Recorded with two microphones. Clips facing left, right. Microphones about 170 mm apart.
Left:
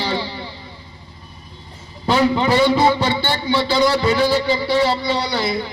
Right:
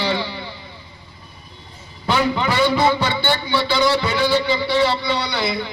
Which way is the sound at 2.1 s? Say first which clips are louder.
Left 4 dB; 35° left (ahead or behind).